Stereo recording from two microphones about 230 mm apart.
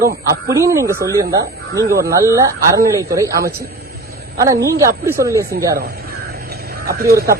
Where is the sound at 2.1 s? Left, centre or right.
Centre.